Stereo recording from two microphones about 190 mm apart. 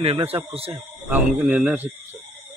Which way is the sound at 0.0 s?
30° right (ahead or behind).